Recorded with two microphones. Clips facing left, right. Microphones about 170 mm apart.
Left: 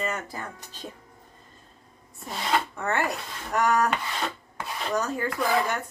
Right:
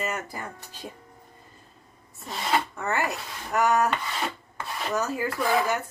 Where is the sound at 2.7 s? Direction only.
Centre (ahead or behind).